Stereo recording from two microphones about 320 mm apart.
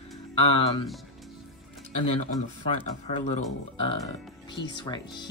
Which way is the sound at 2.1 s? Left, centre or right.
Left.